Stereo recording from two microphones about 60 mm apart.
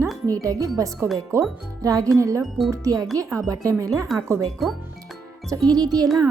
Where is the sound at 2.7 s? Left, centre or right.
Right.